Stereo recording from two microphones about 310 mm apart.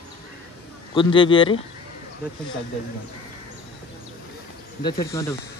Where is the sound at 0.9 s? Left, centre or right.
Centre.